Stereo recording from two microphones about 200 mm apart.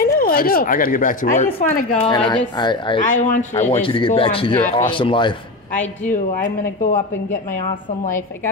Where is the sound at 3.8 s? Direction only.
25° left (ahead or behind).